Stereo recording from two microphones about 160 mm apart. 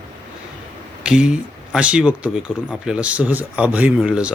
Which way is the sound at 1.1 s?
5° right (ahead or behind).